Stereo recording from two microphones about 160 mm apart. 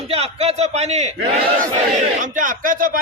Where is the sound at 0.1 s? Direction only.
40° right (ahead or behind).